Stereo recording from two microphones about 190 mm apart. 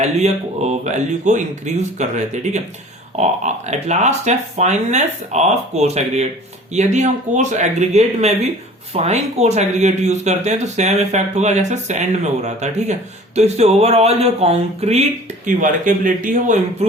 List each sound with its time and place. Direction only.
0.0 s speech: 35° right (ahead or behind)